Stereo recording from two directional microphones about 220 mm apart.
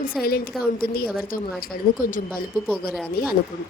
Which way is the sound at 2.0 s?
35° left (ahead or behind).